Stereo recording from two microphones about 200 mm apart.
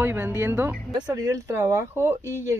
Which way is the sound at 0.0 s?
10° right (ahead or behind).